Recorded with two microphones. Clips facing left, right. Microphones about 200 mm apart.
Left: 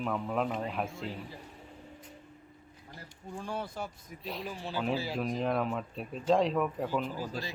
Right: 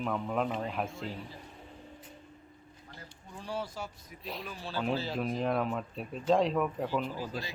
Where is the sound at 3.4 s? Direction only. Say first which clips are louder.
Even; 55° left (ahead or behind).